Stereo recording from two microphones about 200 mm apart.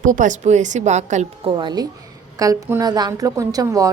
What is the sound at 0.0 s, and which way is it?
A woman's voice, 40° right (ahead or behind).